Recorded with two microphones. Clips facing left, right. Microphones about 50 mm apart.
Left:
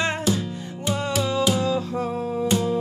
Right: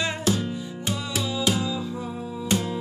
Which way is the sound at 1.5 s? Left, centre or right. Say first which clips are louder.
Left 5 dB; left.